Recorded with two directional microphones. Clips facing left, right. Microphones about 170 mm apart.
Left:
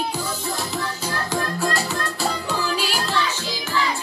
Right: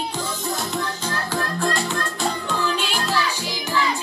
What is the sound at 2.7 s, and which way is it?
Child singing, 5° left (ahead or behind).